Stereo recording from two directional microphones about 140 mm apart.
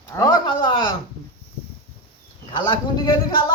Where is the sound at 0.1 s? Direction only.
25° left (ahead or behind).